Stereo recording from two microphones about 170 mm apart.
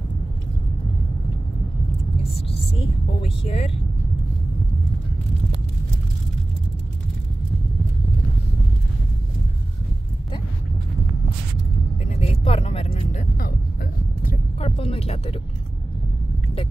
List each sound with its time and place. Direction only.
3.2 s speech: 35° left (ahead or behind)
12.0 s vehicle: 40° left (ahead or behind)
14.6 s music: 35° left (ahead or behind)